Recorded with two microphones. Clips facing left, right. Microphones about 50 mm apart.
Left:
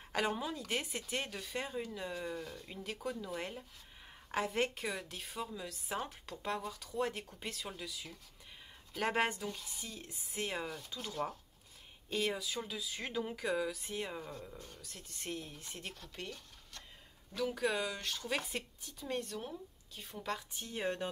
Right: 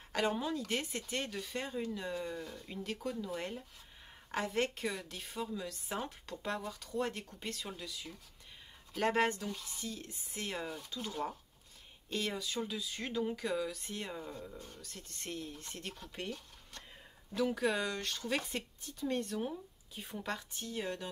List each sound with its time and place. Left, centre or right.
0.1 s speech: centre
17.4 s speech: centre
20.6 s speech: left